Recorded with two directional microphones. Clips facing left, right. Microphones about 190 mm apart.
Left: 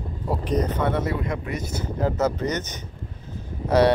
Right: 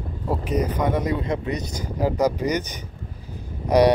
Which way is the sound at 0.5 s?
10° right (ahead or behind).